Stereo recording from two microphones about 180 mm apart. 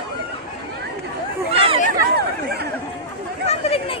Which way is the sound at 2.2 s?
65° right (ahead or behind).